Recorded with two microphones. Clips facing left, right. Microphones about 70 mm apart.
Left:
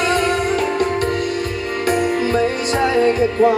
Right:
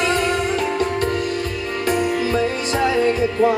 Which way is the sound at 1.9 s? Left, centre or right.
Centre.